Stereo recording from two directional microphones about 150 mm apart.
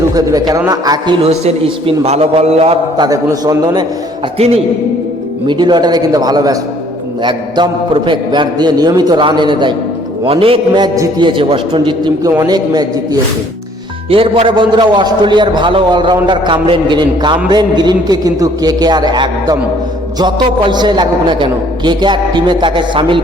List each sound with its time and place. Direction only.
0.1 s a man's voice: 25° right (ahead or behind)
1.2 s a man's voice: 45° right (ahead or behind)
3.0 s a man's voice: 25° right (ahead or behind)
4.4 s a man's voice: 45° right (ahead or behind)
5.5 s a man's voice: 30° right (ahead or behind)
14.1 s a man's voice: 40° right (ahead or behind)